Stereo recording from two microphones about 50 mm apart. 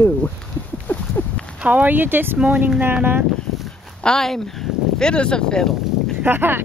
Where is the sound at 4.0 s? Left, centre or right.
Centre.